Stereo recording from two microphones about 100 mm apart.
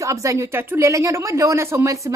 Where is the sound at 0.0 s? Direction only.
30° right (ahead or behind).